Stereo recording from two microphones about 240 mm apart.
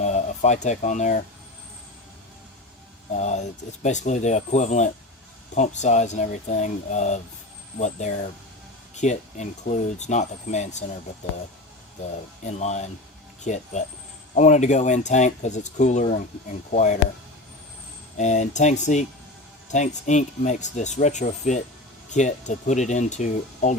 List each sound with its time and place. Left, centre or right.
0.0 s speech: left
3.2 s speech: left
12.5 s speech: left
18.2 s speech: left